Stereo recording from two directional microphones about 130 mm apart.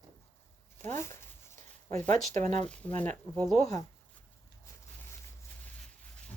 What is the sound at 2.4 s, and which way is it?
Speech, 65° right (ahead or behind).